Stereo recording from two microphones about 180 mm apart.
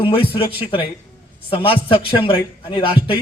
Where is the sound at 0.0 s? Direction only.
30° left (ahead or behind).